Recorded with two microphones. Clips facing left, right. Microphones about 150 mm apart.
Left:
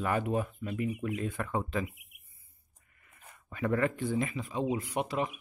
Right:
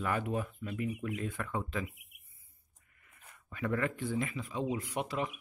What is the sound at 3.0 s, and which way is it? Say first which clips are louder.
Speech: left 3 dB; 35° left (ahead or behind).